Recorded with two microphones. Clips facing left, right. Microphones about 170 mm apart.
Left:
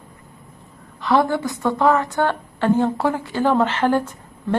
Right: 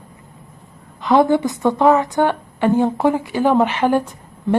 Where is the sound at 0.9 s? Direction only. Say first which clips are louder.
Right 4 dB; 20° right (ahead or behind).